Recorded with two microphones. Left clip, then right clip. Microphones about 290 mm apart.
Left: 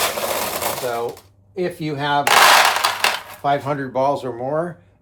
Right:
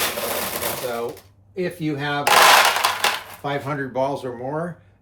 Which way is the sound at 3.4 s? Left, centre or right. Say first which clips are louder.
Left 6 dB; centre.